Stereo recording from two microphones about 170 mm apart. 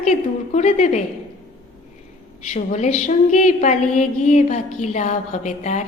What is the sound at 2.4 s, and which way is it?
A woman's voice, 45° left (ahead or behind).